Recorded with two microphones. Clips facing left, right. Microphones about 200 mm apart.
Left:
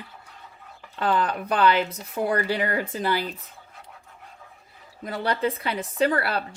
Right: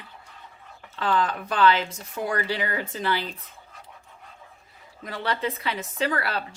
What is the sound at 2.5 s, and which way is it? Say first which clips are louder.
Speech: left 3 dB; 45° left (ahead or behind).